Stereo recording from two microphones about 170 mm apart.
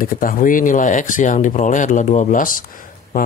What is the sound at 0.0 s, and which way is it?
Speech, 60° left (ahead or behind).